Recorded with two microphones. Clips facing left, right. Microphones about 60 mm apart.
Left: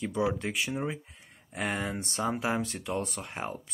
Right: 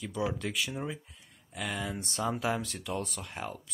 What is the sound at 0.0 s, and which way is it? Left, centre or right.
Speech, left.